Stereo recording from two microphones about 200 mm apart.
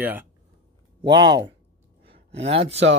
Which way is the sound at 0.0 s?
10° right (ahead or behind).